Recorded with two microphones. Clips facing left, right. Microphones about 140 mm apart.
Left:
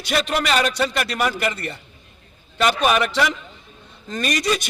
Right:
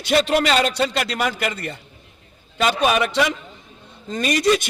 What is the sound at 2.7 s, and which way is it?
A man's voice, 20° right (ahead or behind).